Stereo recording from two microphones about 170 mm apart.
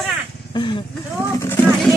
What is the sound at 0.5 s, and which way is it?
Speech, 25° left (ahead or behind).